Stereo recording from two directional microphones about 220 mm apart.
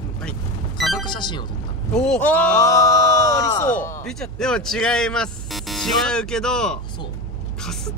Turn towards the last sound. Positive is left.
turn(degrees=5)  # may be behind; listen again after turning